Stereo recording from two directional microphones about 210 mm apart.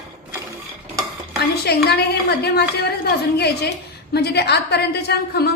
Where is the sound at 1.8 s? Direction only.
50° left (ahead or behind).